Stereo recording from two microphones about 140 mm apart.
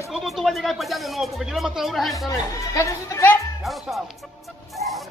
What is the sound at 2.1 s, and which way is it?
Speech, 25° left (ahead or behind).